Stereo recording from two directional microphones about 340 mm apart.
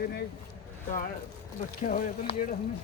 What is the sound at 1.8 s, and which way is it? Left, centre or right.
Speech, left.